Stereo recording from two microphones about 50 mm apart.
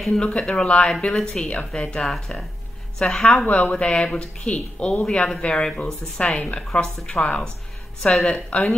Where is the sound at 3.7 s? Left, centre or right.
Centre.